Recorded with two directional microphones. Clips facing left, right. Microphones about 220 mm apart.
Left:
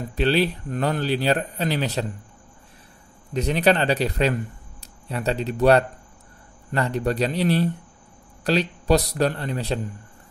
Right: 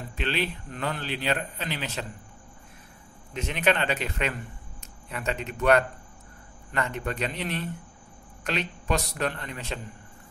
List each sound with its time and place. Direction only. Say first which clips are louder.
0.1 s speech: left 9 dB; 35° left (ahead or behind)
3.3 s speech: left 6 dB; 35° left (ahead or behind)